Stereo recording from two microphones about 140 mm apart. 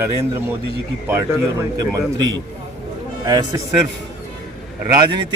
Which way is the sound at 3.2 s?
25° right (ahead or behind).